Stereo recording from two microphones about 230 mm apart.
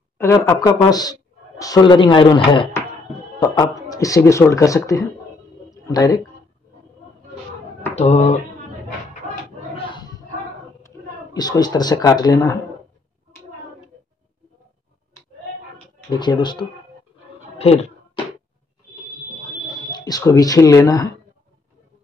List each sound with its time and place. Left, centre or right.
0.2 s speech: centre
7.9 s speech: left
9.8 s a sound: centre
11.3 s speech: centre
16.1 s speech: centre
17.6 s a sound: left
19.9 s speech: centre